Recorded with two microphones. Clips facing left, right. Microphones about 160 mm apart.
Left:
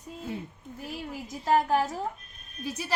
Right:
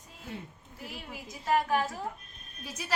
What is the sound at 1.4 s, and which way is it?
Speech, 30° left (ahead or behind).